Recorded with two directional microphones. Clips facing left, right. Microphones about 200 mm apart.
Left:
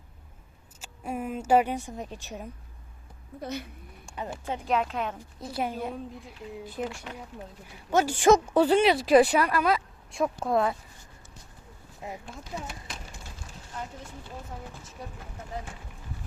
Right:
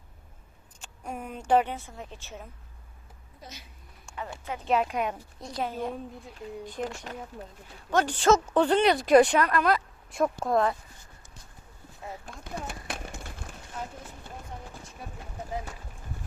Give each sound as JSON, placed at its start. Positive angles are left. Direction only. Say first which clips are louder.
{"t": 0.8, "sound": "a woman's voice", "louder": "left 4 dB", "side_deg": 5}
{"t": 3.4, "sound": "speech", "louder": "left 13 dB", "side_deg": 60}
{"t": 4.0, "sound": "a sound", "louder": "left 2 dB", "side_deg": 20}
{"t": 4.6, "sound": "speech", "louder": "right 2 dB", "side_deg": 0}
{"t": 4.9, "sound": "speech", "louder": "right 2 dB", "side_deg": -15}
{"t": 5.4, "sound": "speech", "louder": "left 1 dB", "side_deg": 5}
{"t": 6.8, "sound": "speech", "louder": "right 1 dB", "side_deg": -40}
{"t": 7.9, "sound": "speech", "louder": "left 2 dB", "side_deg": 10}
{"t": 12.2, "sound": "a sound", "louder": "even", "side_deg": -55}